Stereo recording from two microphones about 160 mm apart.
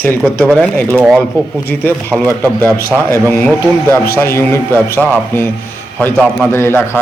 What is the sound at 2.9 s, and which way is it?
Speech, 15° right (ahead or behind).